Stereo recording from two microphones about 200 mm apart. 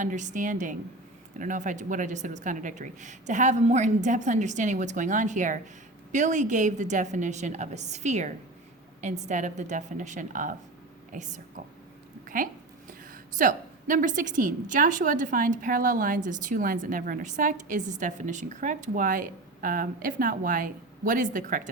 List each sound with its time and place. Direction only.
0.0 s a woman's voice: 40° right (ahead or behind)